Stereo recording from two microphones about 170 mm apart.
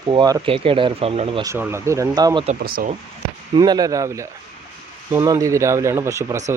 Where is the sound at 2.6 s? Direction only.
60° right (ahead or behind).